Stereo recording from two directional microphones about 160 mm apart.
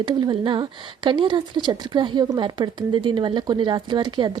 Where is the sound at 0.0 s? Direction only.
30° right (ahead or behind).